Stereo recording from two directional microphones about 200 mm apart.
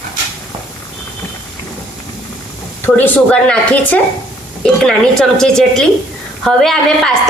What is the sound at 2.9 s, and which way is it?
A woman's voice, 10° left (ahead or behind).